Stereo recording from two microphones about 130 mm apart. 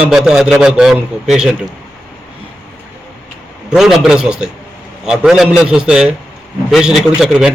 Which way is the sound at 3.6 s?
5° right (ahead or behind).